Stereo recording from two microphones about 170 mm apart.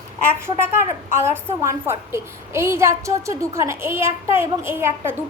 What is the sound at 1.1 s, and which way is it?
A woman's voice, 15° right (ahead or behind).